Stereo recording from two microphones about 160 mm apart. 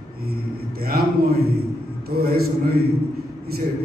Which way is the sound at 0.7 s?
70° right (ahead or behind).